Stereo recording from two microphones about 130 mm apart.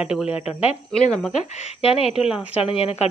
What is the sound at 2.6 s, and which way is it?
Speech, 50° left (ahead or behind).